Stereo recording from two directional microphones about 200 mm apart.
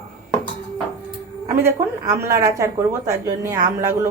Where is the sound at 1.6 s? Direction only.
15° right (ahead or behind).